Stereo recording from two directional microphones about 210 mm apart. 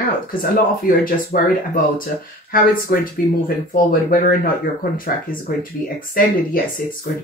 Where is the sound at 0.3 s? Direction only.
40° left (ahead or behind).